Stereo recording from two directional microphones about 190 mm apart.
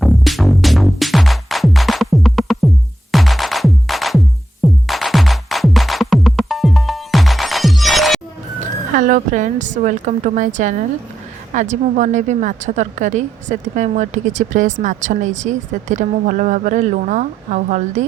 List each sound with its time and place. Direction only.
0.0 s music: centre (ahead or behind)
8.9 s a woman's voice: 40° right (ahead or behind)